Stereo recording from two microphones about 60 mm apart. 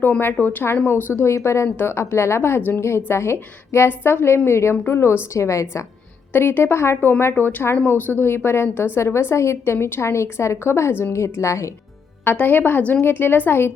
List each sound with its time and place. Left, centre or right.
0.2 s a woman's voice: left
2.6 s a woman's voice: left
2.8 s a woman's voice: left
6.3 s a woman's voice: left
12.2 s a woman's voice: left